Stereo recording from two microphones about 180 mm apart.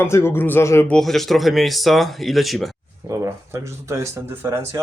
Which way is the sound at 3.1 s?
15° right (ahead or behind).